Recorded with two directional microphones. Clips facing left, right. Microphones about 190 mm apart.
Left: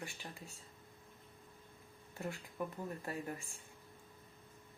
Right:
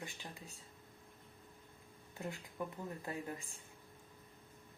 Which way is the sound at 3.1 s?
20° right (ahead or behind).